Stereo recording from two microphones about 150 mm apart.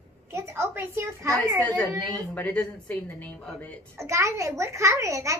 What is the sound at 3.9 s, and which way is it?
A child's voice, 20° right (ahead or behind).